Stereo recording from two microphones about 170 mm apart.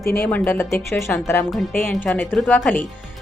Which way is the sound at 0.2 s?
10° left (ahead or behind).